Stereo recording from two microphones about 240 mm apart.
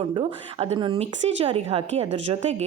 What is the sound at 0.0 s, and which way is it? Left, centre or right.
Speech, right.